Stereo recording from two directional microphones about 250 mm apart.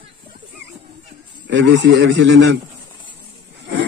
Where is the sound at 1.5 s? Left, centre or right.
Right.